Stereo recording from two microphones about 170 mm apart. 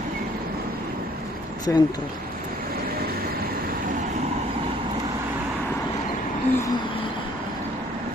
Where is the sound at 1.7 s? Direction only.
15° left (ahead or behind).